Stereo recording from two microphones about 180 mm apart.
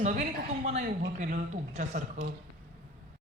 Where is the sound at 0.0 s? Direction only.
40° right (ahead or behind).